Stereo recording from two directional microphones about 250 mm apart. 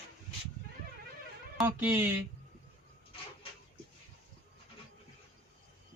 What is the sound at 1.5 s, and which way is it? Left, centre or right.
Speech, centre.